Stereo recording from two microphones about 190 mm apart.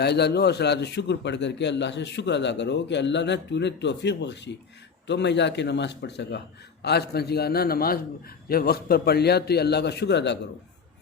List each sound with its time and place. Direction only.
0.0 s a man's voice: 60° left (ahead or behind)